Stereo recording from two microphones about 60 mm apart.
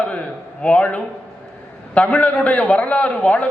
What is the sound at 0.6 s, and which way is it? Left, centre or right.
A man's voice, centre.